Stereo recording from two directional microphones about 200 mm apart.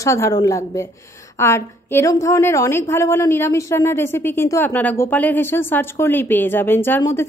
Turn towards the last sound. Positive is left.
turn(degrees=10)  # may be behind; listen again after turning